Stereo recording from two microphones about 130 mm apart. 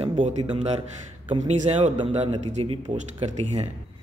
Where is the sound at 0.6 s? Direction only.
55° right (ahead or behind).